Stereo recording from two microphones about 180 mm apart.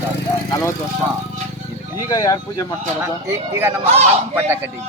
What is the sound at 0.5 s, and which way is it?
Speech, 15° left (ahead or behind).